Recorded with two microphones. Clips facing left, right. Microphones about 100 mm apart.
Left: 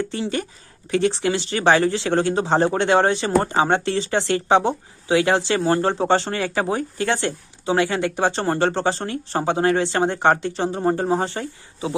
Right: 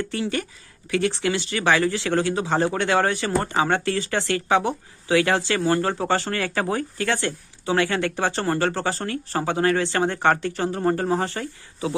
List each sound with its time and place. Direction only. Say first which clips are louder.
0.0 s speech: left 1 dB; 20° left (ahead or behind)